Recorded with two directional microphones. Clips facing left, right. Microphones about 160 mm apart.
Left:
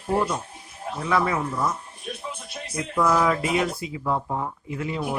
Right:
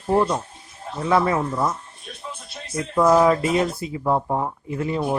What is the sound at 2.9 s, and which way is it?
Speech, 35° right (ahead or behind).